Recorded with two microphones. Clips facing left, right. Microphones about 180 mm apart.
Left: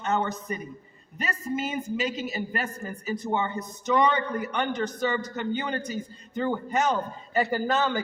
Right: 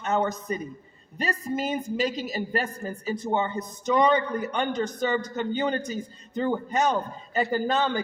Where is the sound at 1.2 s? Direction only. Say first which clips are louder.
Right 2 dB; 35° right (ahead or behind).